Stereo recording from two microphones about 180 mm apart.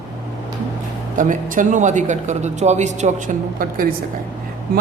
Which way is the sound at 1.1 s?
45° right (ahead or behind).